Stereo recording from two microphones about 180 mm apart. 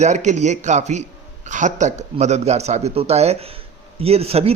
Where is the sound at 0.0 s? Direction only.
40° right (ahead or behind).